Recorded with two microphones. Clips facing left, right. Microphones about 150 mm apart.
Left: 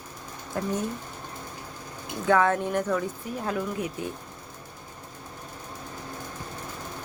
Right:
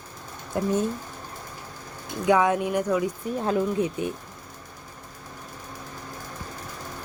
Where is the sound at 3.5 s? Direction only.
25° right (ahead or behind).